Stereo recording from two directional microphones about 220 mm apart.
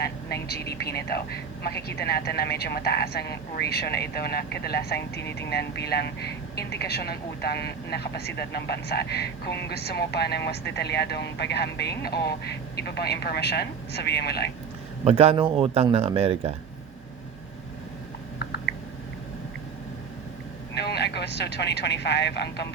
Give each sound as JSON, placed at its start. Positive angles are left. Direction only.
{"t": 0.0, "sound": "speech", "side_deg": 45}
{"t": 15.0, "sound": "a man's voice", "side_deg": -30}
{"t": 20.7, "sound": "speech", "side_deg": 50}